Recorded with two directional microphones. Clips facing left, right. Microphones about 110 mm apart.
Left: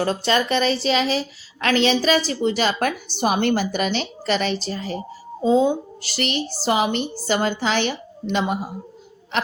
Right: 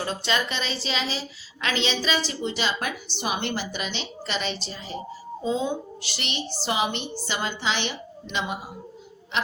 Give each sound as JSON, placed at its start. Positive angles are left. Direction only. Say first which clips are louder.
{"t": 0.3, "sound": "a woman's voice", "louder": "left 8 dB", "side_deg": 45}